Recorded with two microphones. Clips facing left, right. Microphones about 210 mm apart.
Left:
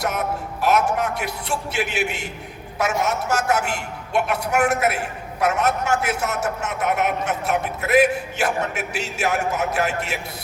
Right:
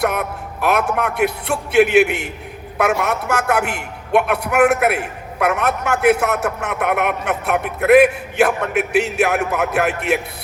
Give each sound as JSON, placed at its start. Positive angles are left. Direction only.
{"t": 0.0, "sound": "a man's voice", "side_deg": -60}